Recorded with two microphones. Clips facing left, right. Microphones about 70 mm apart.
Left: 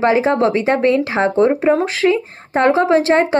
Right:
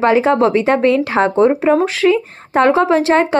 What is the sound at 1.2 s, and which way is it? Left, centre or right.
Speech, right.